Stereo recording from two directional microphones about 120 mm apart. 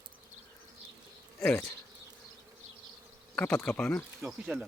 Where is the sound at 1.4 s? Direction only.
15° left (ahead or behind).